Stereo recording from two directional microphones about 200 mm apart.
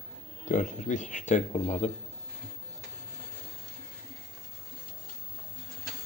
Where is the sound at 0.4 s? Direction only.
40° left (ahead or behind).